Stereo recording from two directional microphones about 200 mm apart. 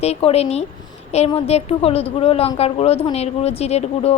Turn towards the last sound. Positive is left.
turn(degrees=30)  # may be behind; listen again after turning